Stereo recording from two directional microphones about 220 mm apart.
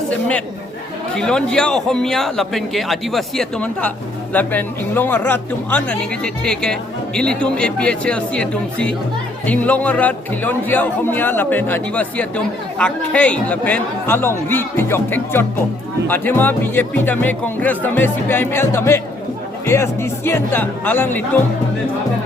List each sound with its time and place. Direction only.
1.1 s a man's voice: 5° left (ahead or behind)